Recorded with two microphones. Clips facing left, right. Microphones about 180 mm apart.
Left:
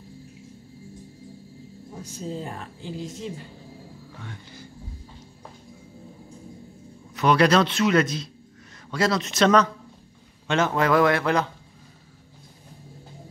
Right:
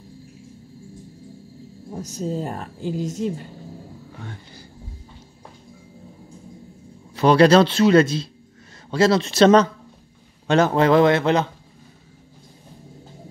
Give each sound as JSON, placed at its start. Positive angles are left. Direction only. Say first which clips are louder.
{"t": 1.9, "sound": "a woman's voice", "louder": "right 6 dB", "side_deg": -40}
{"t": 4.2, "sound": "vehicle", "louder": "right 2 dB", "side_deg": -35}
{"t": 7.2, "sound": "a man's voice", "louder": "right 5 dB", "side_deg": -30}